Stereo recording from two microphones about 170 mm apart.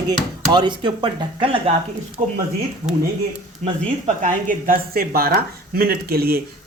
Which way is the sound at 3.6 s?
45° right (ahead or behind).